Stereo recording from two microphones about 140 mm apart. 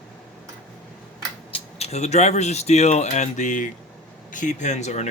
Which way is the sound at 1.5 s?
50° left (ahead or behind).